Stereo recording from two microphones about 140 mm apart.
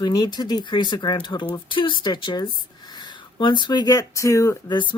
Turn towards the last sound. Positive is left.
turn(degrees=30)  # may be behind; listen again after turning